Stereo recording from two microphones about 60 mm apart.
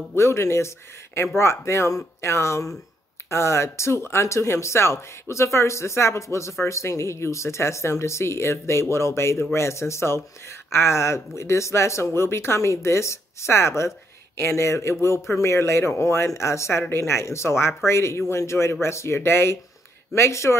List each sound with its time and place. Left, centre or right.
0.1 s speech: left